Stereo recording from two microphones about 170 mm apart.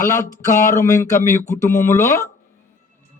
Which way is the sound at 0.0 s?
15° left (ahead or behind).